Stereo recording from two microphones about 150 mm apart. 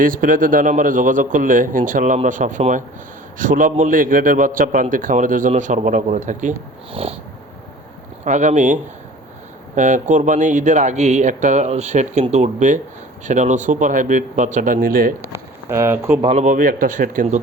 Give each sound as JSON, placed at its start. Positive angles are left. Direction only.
{"t": 0.0, "sound": "a man's voice", "side_deg": -70}
{"t": 6.9, "sound": "cat", "side_deg": -40}
{"t": 8.2, "sound": "a man's voice", "side_deg": -55}
{"t": 15.3, "sound": "speech", "side_deg": -15}
{"t": 16.2, "sound": "a man's voice", "side_deg": -50}